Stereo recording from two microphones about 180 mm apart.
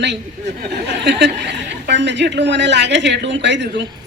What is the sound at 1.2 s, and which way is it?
Speech, 75° right (ahead or behind).